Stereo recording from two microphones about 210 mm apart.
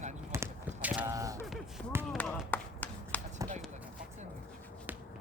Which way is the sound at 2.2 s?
5° left (ahead or behind).